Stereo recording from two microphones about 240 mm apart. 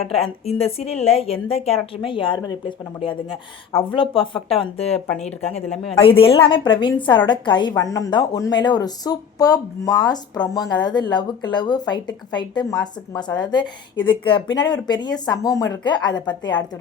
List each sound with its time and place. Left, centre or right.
0.2 s a woman's voice: left
5.6 s speech: centre
6.0 s a woman's voice: left